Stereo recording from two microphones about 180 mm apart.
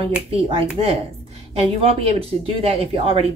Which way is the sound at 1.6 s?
30° right (ahead or behind).